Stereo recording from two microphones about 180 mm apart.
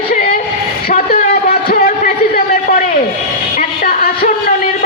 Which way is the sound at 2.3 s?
45° left (ahead or behind).